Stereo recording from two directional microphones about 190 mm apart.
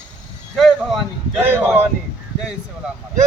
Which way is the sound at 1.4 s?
10° right (ahead or behind).